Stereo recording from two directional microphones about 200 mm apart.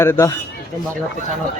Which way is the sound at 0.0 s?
15° left (ahead or behind).